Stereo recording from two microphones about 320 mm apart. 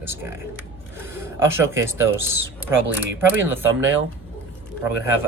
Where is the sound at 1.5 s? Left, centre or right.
Centre.